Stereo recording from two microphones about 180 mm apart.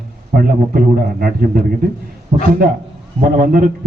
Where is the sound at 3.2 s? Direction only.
50° right (ahead or behind).